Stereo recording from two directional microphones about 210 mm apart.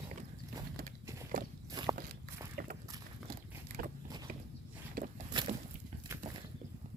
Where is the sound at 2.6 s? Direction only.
45° right (ahead or behind).